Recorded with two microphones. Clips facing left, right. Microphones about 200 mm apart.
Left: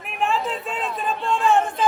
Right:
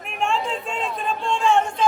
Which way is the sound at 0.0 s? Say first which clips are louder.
Left 1 dB; centre (ahead or behind).